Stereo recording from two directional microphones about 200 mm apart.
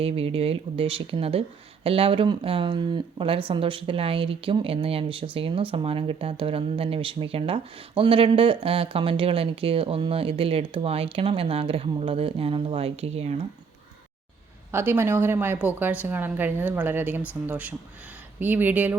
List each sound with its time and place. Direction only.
0.0 s speech: 30° right (ahead or behind)
14.7 s speech: 10° right (ahead or behind)